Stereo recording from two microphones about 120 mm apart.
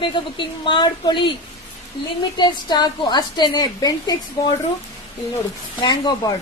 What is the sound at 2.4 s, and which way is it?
A woman's voice, 35° left (ahead or behind).